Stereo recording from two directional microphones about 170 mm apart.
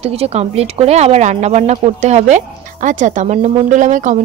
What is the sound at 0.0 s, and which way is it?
Speech, 40° right (ahead or behind).